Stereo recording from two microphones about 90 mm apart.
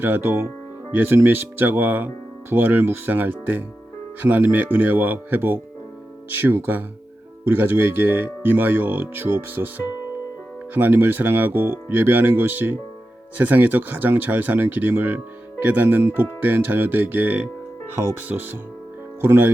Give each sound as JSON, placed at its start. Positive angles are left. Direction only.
{"t": 0.0, "sound": "speech", "side_deg": -25}